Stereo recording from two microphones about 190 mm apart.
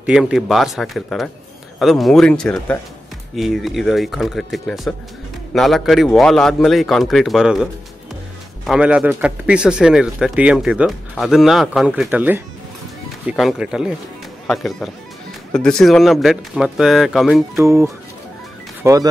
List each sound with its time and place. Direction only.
0.0 s a man's voice: 5° right (ahead or behind)
17.6 s speech: 15° right (ahead or behind)